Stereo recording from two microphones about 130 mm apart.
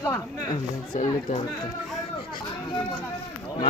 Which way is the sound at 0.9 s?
90° left.